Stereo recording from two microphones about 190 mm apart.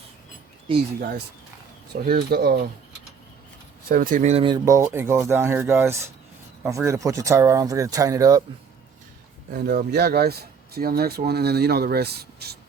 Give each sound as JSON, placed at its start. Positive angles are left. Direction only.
{"t": 1.9, "sound": "speech", "side_deg": -55}
{"t": 3.8, "sound": "speech", "side_deg": -45}
{"t": 9.5, "sound": "speech", "side_deg": -55}